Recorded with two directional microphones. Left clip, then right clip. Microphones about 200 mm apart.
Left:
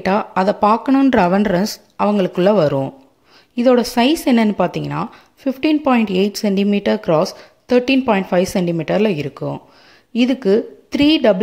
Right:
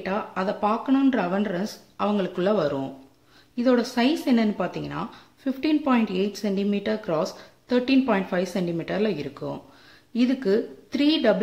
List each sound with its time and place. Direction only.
0.0 s speech: 40° left (ahead or behind)